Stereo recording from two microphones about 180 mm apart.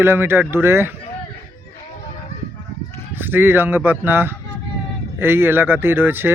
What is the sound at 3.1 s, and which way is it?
Speech, 10° right (ahead or behind).